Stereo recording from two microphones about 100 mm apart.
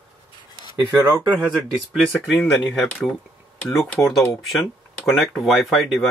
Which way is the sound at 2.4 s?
15° left (ahead or behind).